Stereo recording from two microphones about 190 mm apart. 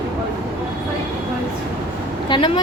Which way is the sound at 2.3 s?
25° left (ahead or behind).